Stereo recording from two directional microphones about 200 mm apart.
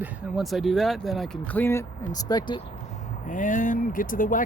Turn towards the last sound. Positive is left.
turn(degrees=40)  # may be behind; listen again after turning